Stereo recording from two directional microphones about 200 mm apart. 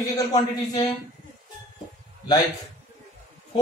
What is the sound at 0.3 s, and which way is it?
Speech, 20° left (ahead or behind).